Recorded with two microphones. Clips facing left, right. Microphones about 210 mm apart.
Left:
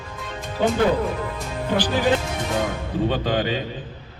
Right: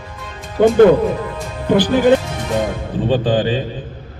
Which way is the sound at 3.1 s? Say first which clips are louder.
Right 10 dB; 30° right (ahead or behind).